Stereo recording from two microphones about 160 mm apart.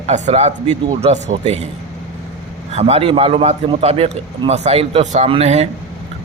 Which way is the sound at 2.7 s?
40° right (ahead or behind).